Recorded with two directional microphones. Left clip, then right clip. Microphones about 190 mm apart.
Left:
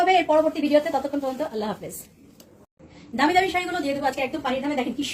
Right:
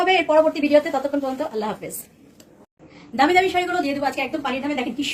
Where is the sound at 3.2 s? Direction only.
20° right (ahead or behind).